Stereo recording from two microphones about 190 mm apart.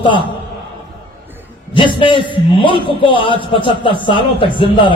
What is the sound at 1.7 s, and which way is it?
Speech, 25° left (ahead or behind).